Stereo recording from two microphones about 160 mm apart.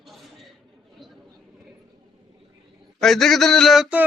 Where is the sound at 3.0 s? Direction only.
Centre (ahead or behind).